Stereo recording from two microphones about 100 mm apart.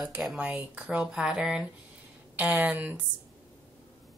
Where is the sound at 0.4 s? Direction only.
15° right (ahead or behind).